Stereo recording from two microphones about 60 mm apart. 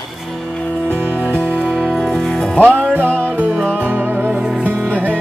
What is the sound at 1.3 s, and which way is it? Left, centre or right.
Music, left.